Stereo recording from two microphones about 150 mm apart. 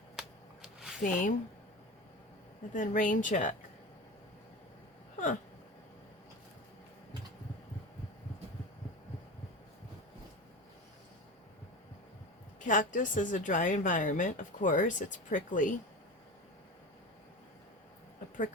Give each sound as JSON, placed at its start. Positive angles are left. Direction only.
{"t": 0.2, "sound": "a sound", "side_deg": -5}
{"t": 1.0, "sound": "a woman's voice", "side_deg": 60}
{"t": 2.7, "sound": "a woman's voice", "side_deg": 60}
{"t": 12.5, "sound": "a woman's voice", "side_deg": 60}